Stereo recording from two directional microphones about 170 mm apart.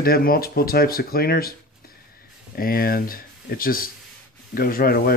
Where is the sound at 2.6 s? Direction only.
60° left (ahead or behind).